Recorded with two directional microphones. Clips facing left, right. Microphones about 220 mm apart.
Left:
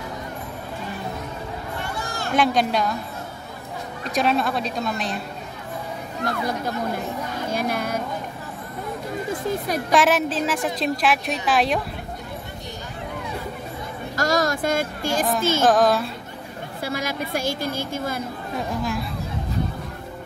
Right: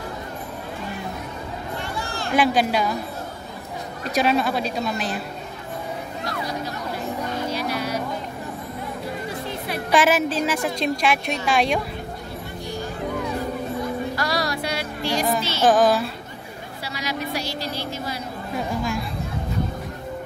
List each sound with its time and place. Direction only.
2.3 s a woman's voice: 5° right (ahead or behind)
4.1 s a woman's voice: centre (ahead or behind)
6.2 s a woman's voice: 50° left (ahead or behind)
7.5 s music: 50° left (ahead or behind)
9.3 s music: 45° left (ahead or behind)
9.9 s a woman's voice: centre (ahead or behind)
14.1 s a sound: 45° left (ahead or behind)
15.6 s a woman's voice: centre (ahead or behind)
16.8 s a woman's voice: 50° left (ahead or behind)